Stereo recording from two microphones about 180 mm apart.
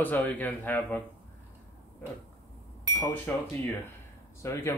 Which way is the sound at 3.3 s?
10° left (ahead or behind).